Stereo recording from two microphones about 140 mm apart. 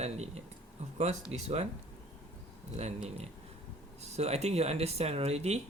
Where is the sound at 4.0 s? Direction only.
50° right (ahead or behind).